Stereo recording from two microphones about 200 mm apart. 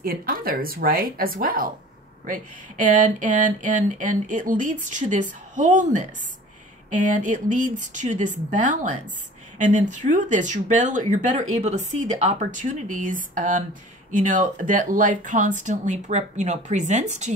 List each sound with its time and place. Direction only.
0.0 s a woman's voice: 45° right (ahead or behind)